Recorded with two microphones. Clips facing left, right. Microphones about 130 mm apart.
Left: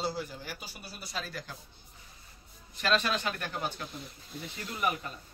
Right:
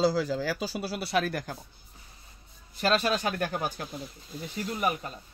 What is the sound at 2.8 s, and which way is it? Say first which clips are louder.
Speech: right 4 dB; 40° right (ahead or behind).